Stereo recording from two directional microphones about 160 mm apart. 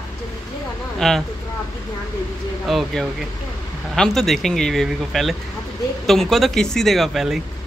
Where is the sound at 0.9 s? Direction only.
Centre (ahead or behind).